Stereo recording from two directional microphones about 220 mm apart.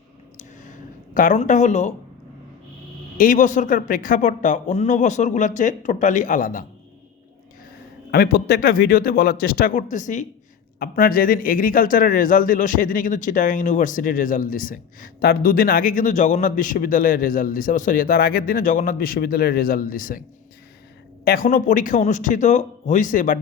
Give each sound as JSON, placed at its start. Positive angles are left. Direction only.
{"t": 0.3, "sound": "a sound", "side_deg": 35}
{"t": 3.2, "sound": "a man's voice", "side_deg": 35}
{"t": 8.1, "sound": "a man's voice", "side_deg": 45}
{"t": 21.2, "sound": "a man's voice", "side_deg": 40}